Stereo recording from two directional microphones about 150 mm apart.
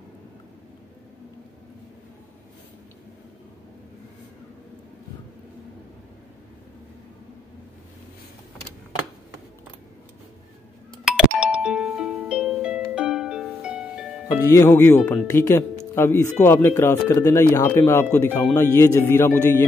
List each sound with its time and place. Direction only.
11.1 s music: 5° right (ahead or behind)
14.5 s speech: 15° left (ahead or behind)